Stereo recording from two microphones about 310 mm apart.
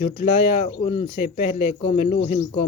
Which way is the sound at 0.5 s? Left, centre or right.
Left.